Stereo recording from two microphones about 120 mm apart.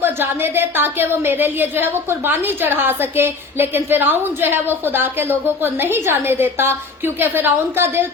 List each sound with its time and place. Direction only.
0.0 s a woman's voice: 15° right (ahead or behind)